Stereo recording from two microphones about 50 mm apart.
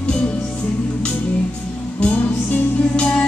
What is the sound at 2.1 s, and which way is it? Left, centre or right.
Music, left.